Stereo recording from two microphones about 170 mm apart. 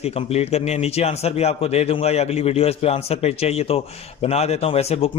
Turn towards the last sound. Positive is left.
turn(degrees=35)  # may be behind; listen again after turning